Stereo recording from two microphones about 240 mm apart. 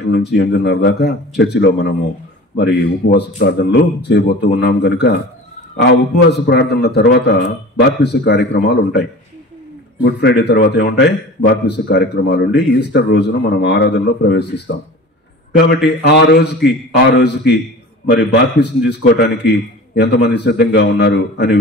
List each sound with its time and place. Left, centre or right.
0.1 s speech: left
10.0 s speech: left
15.5 s speech: left